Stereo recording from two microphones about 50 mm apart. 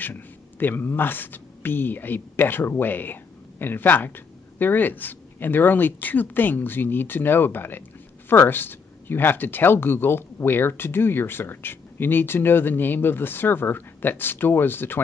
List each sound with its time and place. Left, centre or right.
0.0 s speech: left